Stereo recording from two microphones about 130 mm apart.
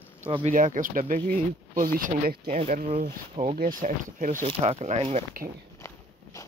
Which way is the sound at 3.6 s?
90° right.